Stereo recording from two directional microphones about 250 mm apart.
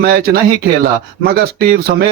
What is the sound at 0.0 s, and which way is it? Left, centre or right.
Speech, right.